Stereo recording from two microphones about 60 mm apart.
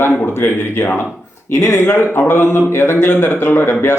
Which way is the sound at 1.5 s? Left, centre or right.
Left.